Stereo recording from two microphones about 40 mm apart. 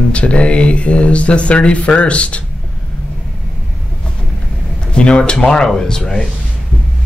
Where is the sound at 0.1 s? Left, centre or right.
Left.